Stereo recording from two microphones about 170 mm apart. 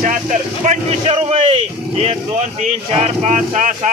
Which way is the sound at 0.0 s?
45° right (ahead or behind).